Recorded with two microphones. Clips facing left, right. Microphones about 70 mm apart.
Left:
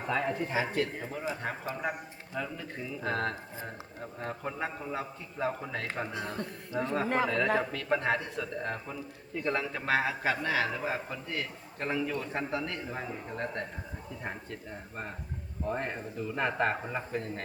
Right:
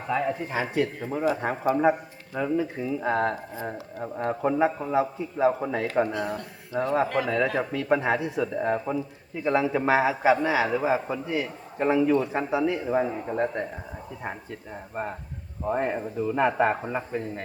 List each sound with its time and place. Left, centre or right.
0.1 s speech: centre
0.7 s a man's voice: centre
13.4 s a man's voice: centre
15.6 s a man's voice: centre